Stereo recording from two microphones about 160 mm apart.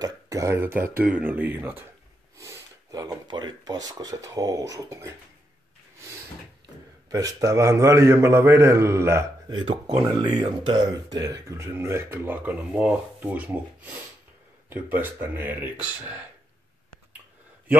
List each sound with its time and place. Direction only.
0.0 s speech: 20° right (ahead or behind)
7.1 s a man's voice: 20° right (ahead or behind)
9.6 s speech: 30° right (ahead or behind); by 16.2 s 10° right (ahead or behind)